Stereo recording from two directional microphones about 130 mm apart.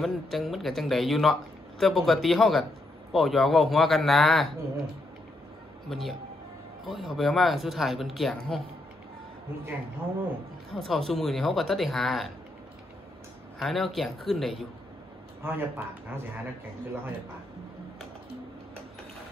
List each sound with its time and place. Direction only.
0.0 s speech: centre (ahead or behind)
5.9 s speech: centre (ahead or behind)
10.7 s speech: centre (ahead or behind)
13.6 s speech: centre (ahead or behind)
15.4 s speech: 15° right (ahead or behind)